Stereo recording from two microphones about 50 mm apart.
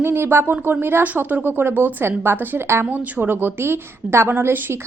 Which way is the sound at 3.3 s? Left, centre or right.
Right.